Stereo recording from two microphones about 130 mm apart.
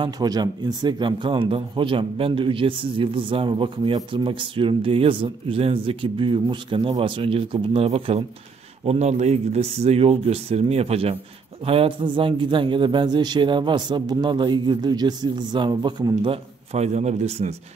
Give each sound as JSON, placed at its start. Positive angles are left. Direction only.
{"t": 0.0, "sound": "speech", "side_deg": -30}
{"t": 16.7, "sound": "a man's voice", "side_deg": -60}